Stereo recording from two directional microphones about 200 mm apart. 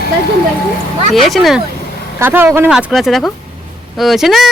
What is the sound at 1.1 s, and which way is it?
Speech, centre (ahead or behind).